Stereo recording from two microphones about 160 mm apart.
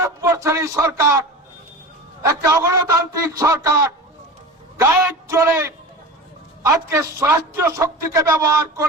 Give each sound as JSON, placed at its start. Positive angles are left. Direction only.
{"t": 0.0, "sound": "speech", "side_deg": -20}
{"t": 2.2, "sound": "a man's voice", "side_deg": -20}